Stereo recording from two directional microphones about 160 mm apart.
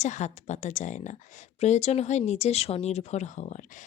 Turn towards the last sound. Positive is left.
turn(degrees=45)  # may be behind; listen again after turning